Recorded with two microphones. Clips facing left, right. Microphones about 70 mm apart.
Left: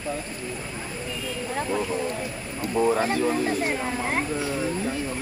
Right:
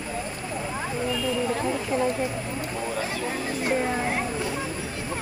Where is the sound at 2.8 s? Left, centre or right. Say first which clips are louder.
Left 9 dB; left.